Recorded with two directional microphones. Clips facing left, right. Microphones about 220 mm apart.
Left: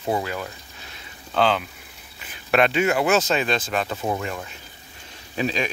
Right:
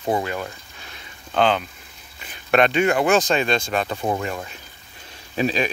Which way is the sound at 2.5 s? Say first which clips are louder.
Right 2 dB; 5° left (ahead or behind).